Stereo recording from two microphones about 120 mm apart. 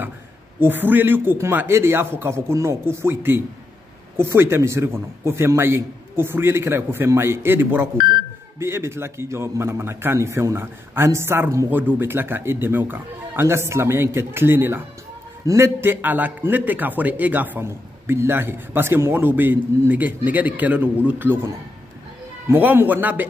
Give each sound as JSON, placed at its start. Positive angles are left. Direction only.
{"t": 0.6, "sound": "a man's voice", "side_deg": -15}
{"t": 22.5, "sound": "a man's voice", "side_deg": -15}